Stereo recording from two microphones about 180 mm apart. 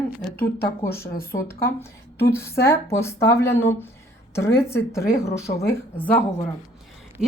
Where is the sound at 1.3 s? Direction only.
15° left (ahead or behind).